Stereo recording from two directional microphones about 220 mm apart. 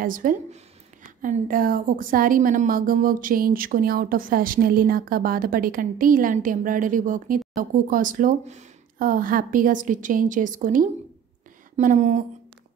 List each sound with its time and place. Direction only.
0.0 s a woman's voice: 40° right (ahead or behind)